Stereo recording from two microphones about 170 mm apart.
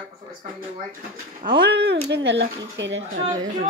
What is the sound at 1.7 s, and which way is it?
Speech, 85° right.